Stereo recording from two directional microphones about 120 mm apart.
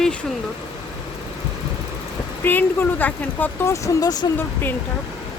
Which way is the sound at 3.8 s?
35° left (ahead or behind).